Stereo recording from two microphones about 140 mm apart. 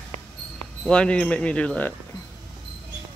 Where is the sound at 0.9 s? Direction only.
5° left (ahead or behind).